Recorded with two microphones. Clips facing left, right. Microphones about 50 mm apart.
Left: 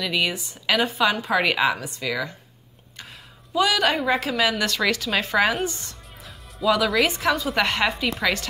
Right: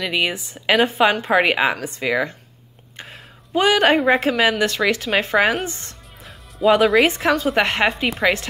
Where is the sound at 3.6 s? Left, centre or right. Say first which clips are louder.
Right 5 dB; right.